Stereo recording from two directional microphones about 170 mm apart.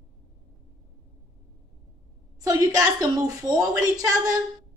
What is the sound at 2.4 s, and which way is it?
A woman's voice, 20° right (ahead or behind).